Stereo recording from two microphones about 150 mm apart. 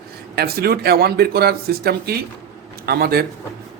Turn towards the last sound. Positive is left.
turn(degrees=-90)